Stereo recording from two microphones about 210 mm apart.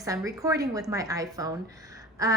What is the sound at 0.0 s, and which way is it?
A woman's voice, 15° right (ahead or behind).